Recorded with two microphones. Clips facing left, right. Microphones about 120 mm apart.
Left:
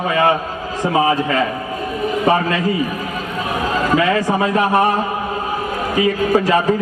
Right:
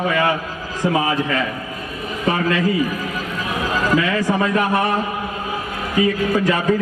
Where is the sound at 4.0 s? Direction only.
35° left (ahead or behind).